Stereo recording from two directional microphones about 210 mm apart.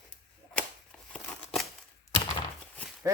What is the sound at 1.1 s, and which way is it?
Scissors, 5° left (ahead or behind).